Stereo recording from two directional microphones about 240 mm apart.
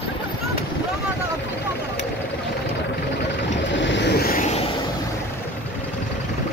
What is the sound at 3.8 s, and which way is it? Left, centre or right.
Vehicle, left.